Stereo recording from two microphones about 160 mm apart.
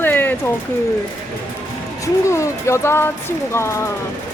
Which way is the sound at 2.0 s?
20° left (ahead or behind).